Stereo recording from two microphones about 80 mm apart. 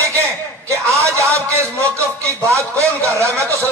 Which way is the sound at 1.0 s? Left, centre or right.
Right.